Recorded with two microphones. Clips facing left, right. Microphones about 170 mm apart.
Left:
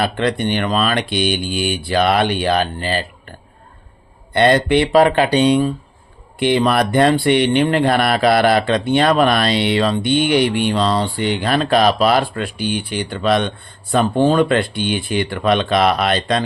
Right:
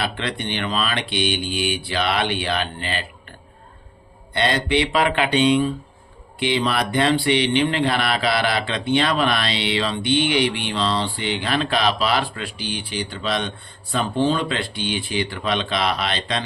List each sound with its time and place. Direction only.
0.0 s speech: 45° left (ahead or behind)
4.4 s speech: 50° left (ahead or behind)